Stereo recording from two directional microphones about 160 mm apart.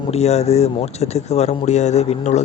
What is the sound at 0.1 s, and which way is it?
Speech, 40° left (ahead or behind).